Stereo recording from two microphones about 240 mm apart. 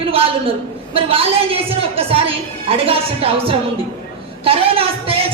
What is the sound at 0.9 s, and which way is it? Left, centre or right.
Speech, right.